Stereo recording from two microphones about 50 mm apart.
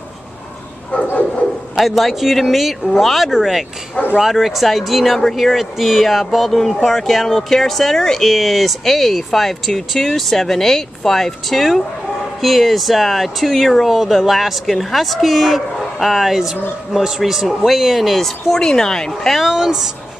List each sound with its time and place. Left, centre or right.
0.9 s a sound: left
1.8 s speech: centre
19.3 s speech: centre